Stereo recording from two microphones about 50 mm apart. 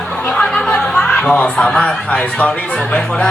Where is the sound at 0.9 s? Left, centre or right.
Centre.